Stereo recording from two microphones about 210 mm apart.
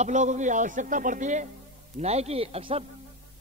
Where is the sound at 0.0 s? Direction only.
35° right (ahead or behind).